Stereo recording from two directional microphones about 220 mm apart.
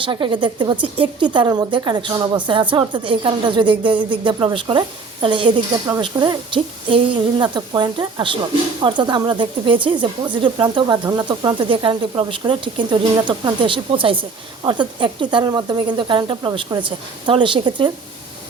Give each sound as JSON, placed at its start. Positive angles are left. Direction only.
{"t": 0.0, "sound": "speech", "side_deg": -20}